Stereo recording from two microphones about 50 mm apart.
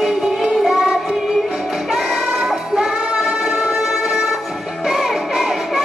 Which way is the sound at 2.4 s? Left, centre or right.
Centre.